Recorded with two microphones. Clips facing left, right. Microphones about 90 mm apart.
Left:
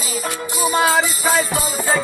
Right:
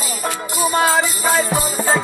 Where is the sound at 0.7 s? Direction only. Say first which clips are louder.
Even; 10° left (ahead or behind).